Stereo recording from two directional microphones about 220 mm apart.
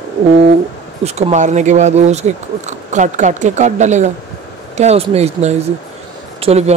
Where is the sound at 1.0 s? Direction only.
30° right (ahead or behind).